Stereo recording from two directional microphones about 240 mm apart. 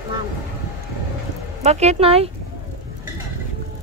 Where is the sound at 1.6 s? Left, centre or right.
Right.